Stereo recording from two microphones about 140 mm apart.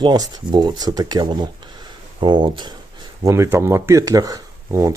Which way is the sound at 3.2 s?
20° right (ahead or behind).